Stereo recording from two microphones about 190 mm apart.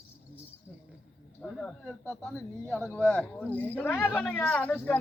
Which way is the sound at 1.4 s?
5° left (ahead or behind).